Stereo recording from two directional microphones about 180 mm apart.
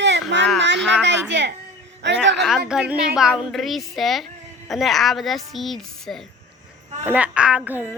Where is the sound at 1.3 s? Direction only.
80° right.